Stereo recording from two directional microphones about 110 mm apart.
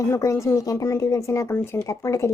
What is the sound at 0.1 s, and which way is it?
A woman's voice, 25° left (ahead or behind).